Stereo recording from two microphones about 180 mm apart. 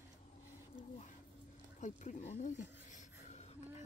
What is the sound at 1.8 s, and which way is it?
Speech, 40° left (ahead or behind).